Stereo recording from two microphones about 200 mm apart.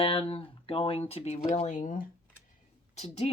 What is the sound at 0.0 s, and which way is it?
Speech, 25° left (ahead or behind).